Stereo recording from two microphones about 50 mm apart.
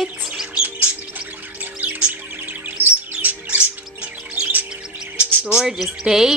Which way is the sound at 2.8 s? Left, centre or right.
Right.